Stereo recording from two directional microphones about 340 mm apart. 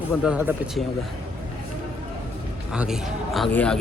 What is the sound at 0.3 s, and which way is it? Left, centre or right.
Speech, centre.